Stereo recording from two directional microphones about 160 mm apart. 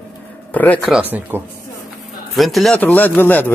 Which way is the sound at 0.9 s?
10° right (ahead or behind).